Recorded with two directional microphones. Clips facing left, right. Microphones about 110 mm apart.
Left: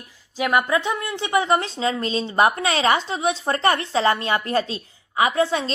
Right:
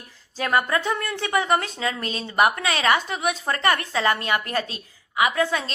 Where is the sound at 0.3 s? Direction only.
15° left (ahead or behind).